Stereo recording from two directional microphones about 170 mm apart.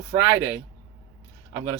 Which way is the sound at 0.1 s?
15° right (ahead or behind).